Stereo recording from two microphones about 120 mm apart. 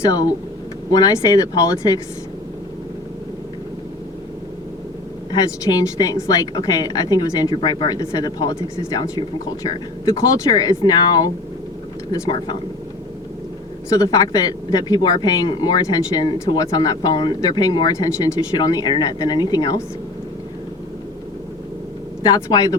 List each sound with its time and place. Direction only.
0.0 s a woman's voice: 30° left (ahead or behind)
5.3 s a woman's voice: 30° left (ahead or behind)
13.9 s a woman's voice: 30° left (ahead or behind)
22.2 s a woman's voice: 30° left (ahead or behind)